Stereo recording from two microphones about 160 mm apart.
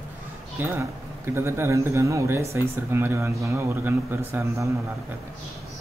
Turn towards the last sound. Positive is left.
turn(degrees=-15)  # may be behind; listen again after turning